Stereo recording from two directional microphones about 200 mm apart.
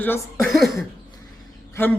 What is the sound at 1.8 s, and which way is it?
Speech, 10° left (ahead or behind).